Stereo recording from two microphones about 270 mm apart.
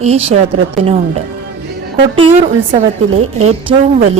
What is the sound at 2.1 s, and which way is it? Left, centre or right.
A woman's voice, centre.